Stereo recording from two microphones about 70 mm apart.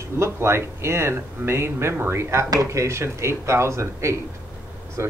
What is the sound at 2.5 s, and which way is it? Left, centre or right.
Speech, right.